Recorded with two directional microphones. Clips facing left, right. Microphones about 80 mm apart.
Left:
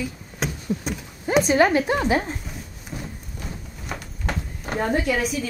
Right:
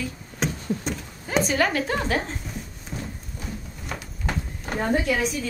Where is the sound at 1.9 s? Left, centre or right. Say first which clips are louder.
Left 4 dB; centre.